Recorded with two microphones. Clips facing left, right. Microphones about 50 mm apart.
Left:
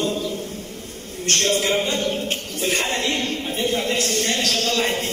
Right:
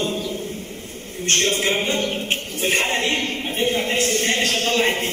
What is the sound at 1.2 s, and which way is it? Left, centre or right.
A man's voice, right.